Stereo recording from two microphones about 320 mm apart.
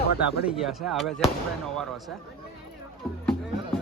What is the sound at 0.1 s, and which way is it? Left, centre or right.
Speech, right.